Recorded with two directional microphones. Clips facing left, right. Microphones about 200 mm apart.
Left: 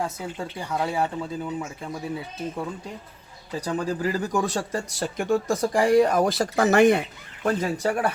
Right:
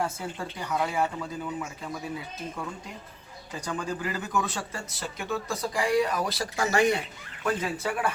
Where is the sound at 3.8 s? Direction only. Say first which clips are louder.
Left 6 dB; 35° left (ahead or behind); by 7.0 s 55° left (ahead or behind).